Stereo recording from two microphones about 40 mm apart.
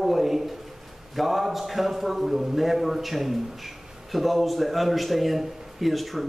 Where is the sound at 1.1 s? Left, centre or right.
Centre.